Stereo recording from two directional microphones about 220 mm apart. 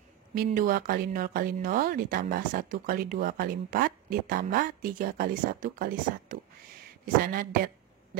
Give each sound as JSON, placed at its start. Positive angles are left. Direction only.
{"t": 0.4, "sound": "speech", "side_deg": -40}